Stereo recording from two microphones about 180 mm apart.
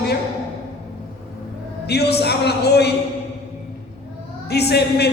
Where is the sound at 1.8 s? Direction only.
65° left (ahead or behind).